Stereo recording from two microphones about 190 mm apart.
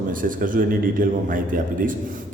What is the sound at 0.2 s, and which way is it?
A man's voice, 45° right (ahead or behind).